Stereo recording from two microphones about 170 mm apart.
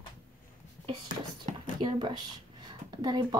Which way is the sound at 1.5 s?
40° right (ahead or behind).